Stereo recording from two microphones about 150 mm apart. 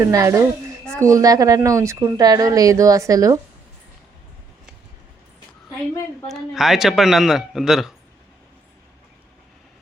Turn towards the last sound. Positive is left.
turn(degrees=-5)  # may be behind; listen again after turning